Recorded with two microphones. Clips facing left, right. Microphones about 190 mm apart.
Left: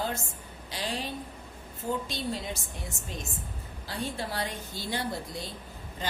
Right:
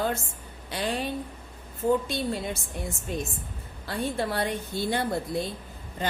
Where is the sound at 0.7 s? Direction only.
55° right (ahead or behind).